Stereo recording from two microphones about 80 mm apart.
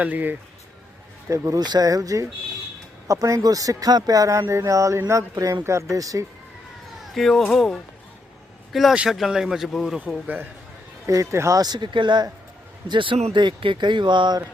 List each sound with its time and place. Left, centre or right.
0.0 s speech: right
1.3 s speech: right
7.0 s speech: centre
11.0 s speech: right
11.5 s speech: right